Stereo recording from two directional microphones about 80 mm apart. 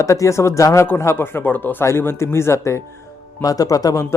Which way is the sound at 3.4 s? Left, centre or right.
Left.